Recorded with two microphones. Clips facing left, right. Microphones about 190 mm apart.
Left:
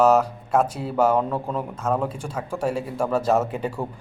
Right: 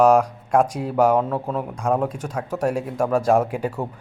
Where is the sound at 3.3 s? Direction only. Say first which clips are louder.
Right 3 dB; 10° right (ahead or behind).